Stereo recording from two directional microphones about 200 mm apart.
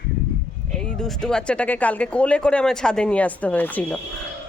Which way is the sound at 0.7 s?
5° left (ahead or behind).